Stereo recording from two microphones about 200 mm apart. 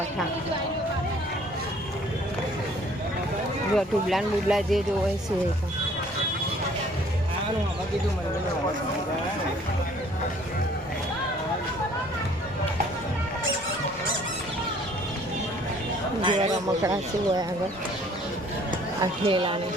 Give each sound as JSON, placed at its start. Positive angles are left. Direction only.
{"t": 3.8, "sound": "speech", "side_deg": 0}
{"t": 16.2, "sound": "speech", "side_deg": -25}
{"t": 19.2, "sound": "speech", "side_deg": -25}